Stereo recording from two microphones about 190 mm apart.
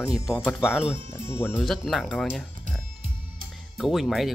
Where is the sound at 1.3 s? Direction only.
10° left (ahead or behind).